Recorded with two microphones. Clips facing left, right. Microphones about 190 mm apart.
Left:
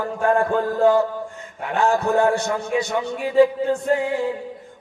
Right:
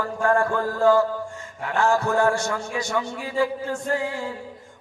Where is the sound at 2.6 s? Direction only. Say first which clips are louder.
Left 7 dB; 60° left (ahead or behind).